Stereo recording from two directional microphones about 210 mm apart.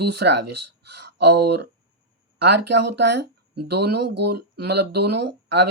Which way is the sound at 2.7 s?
50° right (ahead or behind).